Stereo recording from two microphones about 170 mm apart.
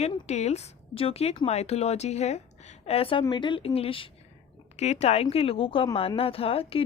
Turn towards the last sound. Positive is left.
turn(degrees=35)  # may be behind; listen again after turning